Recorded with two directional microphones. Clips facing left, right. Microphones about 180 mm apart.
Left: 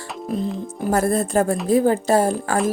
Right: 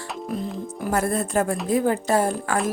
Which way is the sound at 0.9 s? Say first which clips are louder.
Left 4 dB; 35° left (ahead or behind).